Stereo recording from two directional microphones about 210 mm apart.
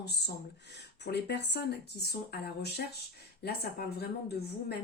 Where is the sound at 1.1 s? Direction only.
55° left (ahead or behind).